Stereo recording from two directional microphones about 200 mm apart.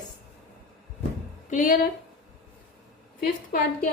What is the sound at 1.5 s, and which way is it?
Speech, 40° left (ahead or behind).